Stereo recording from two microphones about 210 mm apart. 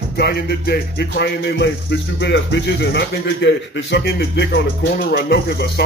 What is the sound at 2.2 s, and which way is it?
Speech, 55° left (ahead or behind).